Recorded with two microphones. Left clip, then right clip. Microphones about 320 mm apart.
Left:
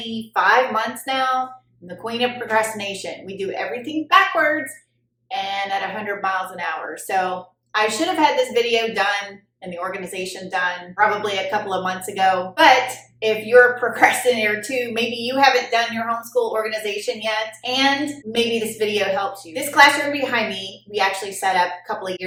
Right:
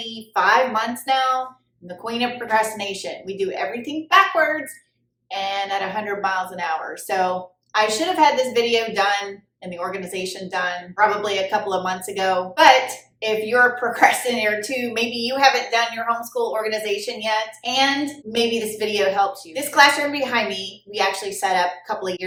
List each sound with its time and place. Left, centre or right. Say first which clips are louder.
0.1 s a woman's voice: left 1 dB; centre